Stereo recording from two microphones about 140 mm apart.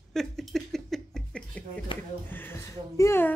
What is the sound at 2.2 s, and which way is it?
Speech, 15° left (ahead or behind).